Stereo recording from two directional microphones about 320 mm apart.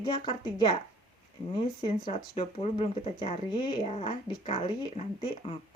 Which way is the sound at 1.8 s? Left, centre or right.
Centre.